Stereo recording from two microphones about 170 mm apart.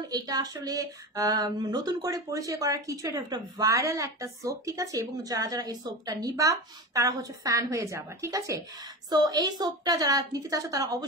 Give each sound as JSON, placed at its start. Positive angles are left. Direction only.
{"t": 0.1, "sound": "speech", "side_deg": -20}